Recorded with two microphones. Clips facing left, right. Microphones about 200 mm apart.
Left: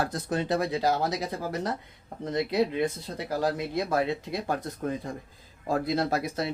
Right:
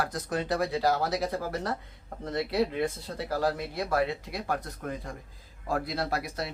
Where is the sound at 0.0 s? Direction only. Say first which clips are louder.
Left 2 dB; 25° left (ahead or behind).